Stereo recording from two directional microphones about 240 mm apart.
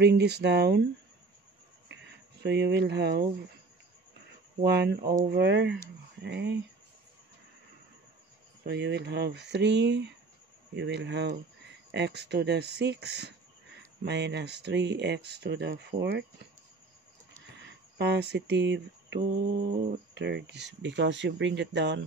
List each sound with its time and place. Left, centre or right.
0.0 s speech: right
1.9 s a sound: right
4.6 s speech: right
8.6 s speech: right
17.9 s speech: right
20.2 s speech: right